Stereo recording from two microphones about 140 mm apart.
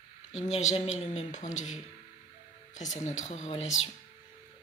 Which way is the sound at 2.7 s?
60° left (ahead or behind).